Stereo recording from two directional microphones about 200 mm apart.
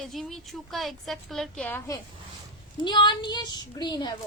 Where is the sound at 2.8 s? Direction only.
25° left (ahead or behind).